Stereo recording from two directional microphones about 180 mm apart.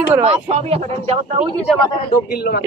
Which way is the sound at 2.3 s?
60° left (ahead or behind).